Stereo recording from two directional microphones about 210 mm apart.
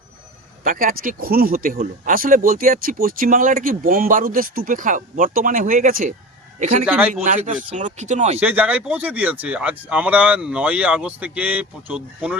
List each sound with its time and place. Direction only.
0.6 s speech: 40° right (ahead or behind)
6.8 s speech: 5° right (ahead or behind)
7.1 s speech: 35° right (ahead or behind)
8.4 s speech: 5° right (ahead or behind)